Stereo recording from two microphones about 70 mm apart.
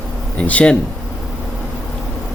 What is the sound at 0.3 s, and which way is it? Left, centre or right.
Speech, centre.